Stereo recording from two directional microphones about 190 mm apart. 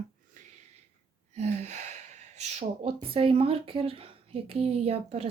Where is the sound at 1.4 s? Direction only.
35° right (ahead or behind).